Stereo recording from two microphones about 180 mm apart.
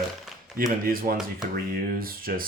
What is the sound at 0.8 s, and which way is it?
Speech, 55° right (ahead or behind).